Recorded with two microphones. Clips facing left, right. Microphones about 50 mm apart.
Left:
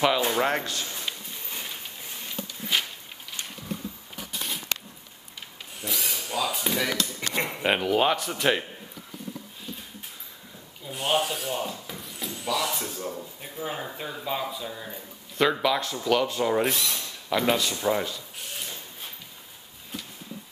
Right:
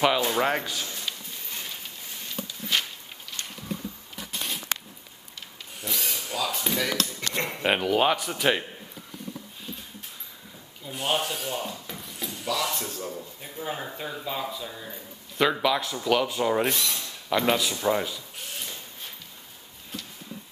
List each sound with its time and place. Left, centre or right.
0.3 s speech: centre
0.8 s a sound: centre
2.7 s walk: centre
5.8 s speech: centre
7.6 s speech: centre
10.9 s speech: centre